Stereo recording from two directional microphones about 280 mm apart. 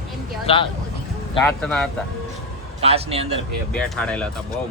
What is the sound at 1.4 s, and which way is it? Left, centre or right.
Speech, centre.